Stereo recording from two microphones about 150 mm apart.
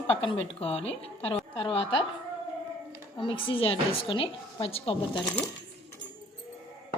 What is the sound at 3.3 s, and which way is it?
A woman's voice, 35° left (ahead or behind).